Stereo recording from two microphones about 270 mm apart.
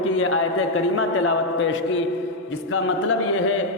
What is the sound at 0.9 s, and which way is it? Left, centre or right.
A man's voice, left.